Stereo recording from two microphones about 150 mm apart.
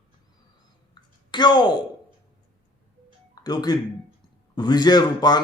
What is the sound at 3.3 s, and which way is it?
A man's voice, 25° left (ahead or behind).